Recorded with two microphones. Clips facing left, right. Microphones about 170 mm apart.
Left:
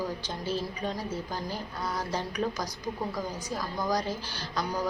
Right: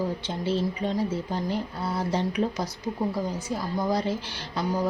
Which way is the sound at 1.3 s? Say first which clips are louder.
Right 6 dB; 25° right (ahead or behind).